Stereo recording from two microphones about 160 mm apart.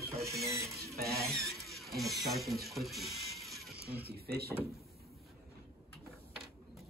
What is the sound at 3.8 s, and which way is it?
Speech, 75° right (ahead or behind).